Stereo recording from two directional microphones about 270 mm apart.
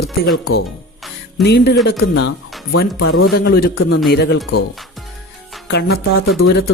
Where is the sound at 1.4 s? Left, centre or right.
Left.